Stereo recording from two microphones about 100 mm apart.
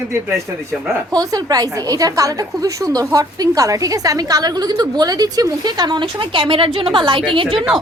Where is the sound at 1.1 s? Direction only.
40° right (ahead or behind); by 7.5 s 60° right (ahead or behind).